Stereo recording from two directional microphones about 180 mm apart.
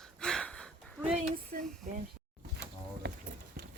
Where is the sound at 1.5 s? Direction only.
55° right (ahead or behind).